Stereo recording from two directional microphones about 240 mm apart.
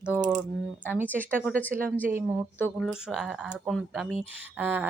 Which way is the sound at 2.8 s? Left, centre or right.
Centre.